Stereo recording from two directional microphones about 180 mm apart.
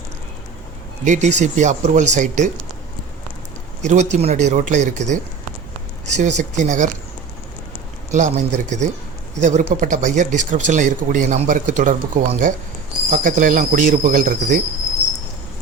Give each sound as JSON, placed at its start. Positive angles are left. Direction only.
{"t": 1.0, "sound": "speech", "side_deg": -40}
{"t": 3.8, "sound": "speech", "side_deg": -40}
{"t": 8.1, "sound": "speech", "side_deg": -40}